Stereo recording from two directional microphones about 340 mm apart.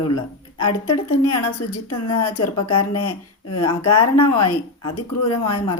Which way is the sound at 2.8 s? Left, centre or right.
Left.